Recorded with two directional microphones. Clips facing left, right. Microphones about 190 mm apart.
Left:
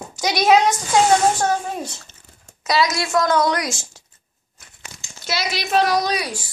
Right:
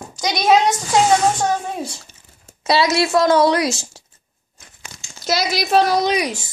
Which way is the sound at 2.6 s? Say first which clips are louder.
Right 4 dB; 30° right (ahead or behind).